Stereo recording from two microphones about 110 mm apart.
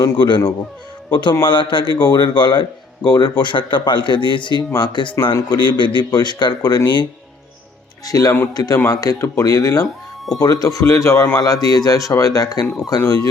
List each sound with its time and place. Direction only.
0.0 s speech: 45° left (ahead or behind)